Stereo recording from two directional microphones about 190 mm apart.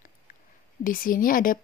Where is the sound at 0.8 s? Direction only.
45° left (ahead or behind).